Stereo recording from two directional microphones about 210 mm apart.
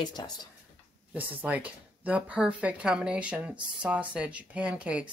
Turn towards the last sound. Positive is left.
turn(degrees=-5)  # may be behind; listen again after turning